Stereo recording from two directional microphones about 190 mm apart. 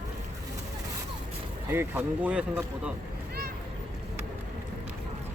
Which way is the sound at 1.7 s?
10° right (ahead or behind).